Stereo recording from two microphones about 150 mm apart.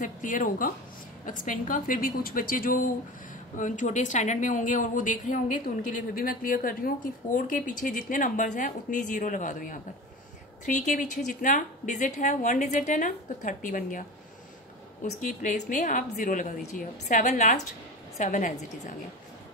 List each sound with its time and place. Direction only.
0.0 s a woman's voice: 60° left (ahead or behind)
15.0 s a woman's voice: 60° left (ahead or behind)